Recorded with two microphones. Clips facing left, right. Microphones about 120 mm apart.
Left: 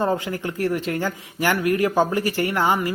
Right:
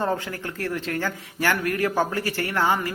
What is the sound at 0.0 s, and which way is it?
Speech, 15° left (ahead or behind).